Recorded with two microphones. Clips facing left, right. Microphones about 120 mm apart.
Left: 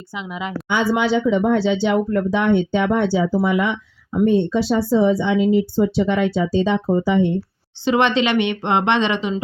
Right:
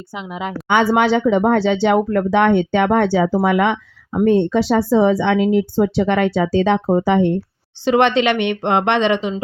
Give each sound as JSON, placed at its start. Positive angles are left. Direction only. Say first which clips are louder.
{"t": 0.1, "sound": "a woman's voice", "louder": "right 2 dB", "side_deg": -50}
{"t": 0.7, "sound": "speech", "louder": "right 4 dB", "side_deg": -75}
{"t": 7.9, "sound": "a woman's voice", "louder": "right 3 dB", "side_deg": -50}